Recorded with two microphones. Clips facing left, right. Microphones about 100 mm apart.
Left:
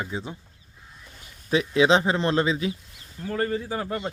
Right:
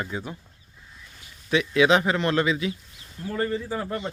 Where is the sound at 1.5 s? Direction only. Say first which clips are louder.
Even; 30° left (ahead or behind).